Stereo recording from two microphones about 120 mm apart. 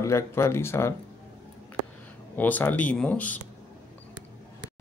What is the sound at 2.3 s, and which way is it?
Speech, 15° left (ahead or behind).